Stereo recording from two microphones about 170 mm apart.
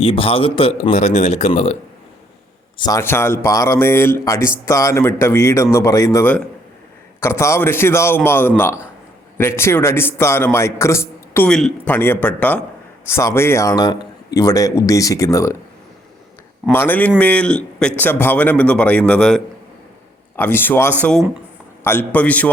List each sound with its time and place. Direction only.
0.0 s speech: 35° left (ahead or behind)
2.7 s a man's voice: 25° left (ahead or behind)
3.0 s speech: 15° left (ahead or behind)
11.4 s a man's voice: 5° left (ahead or behind)
16.7 s speech: 10° left (ahead or behind)